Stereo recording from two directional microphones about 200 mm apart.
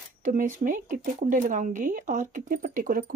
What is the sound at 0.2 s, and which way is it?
Speech, 40° right (ahead or behind).